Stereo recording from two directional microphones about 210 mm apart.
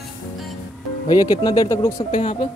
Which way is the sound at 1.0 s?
20° left (ahead or behind).